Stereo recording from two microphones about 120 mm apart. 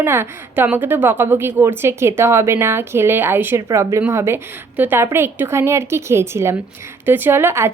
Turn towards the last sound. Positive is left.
turn(degrees=-20)  # may be behind; listen again after turning